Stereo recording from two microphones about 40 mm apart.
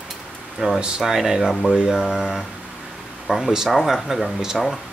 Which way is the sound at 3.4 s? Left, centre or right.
Centre.